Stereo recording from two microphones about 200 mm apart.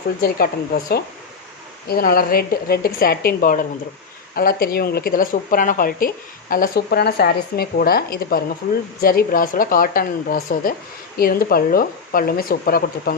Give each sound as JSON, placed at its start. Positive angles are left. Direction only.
{"t": 0.2, "sound": "speech", "side_deg": 50}